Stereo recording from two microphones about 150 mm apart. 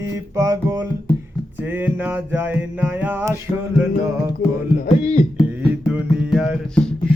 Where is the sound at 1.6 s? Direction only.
10° right (ahead or behind).